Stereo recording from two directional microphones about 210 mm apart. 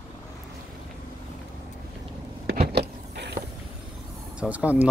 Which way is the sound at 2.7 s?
50° right (ahead or behind).